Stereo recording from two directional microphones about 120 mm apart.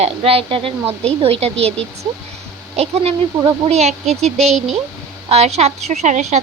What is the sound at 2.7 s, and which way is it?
A woman's voice, 60° right (ahead or behind).